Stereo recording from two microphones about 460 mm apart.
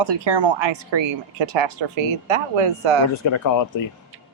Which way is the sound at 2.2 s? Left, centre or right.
Right.